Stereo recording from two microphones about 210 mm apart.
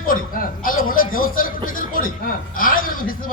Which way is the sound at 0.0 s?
40° left (ahead or behind).